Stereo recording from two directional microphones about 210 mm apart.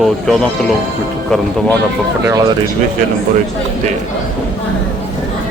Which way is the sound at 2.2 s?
15° right (ahead or behind).